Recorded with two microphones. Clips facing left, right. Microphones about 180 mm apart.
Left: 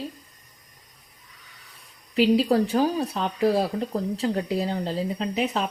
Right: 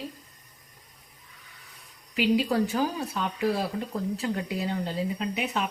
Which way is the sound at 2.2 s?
35° left (ahead or behind).